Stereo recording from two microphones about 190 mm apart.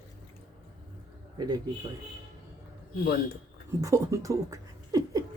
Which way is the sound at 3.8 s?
15° right (ahead or behind).